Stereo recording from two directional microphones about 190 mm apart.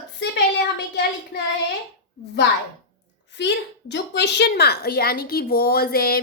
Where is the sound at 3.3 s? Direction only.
65° left (ahead or behind).